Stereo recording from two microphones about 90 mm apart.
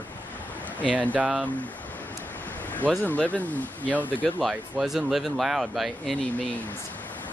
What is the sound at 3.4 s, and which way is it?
Speech, 15° left (ahead or behind).